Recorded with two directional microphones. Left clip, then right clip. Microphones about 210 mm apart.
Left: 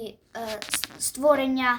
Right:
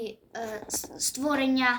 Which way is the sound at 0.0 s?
40° left (ahead or behind).